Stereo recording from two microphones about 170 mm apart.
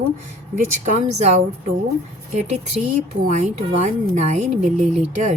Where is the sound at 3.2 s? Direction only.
45° right (ahead or behind).